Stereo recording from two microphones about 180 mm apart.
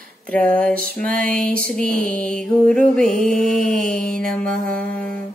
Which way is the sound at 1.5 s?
50° right (ahead or behind).